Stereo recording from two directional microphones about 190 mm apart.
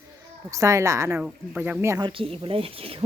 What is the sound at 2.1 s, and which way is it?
Speech, 30° right (ahead or behind).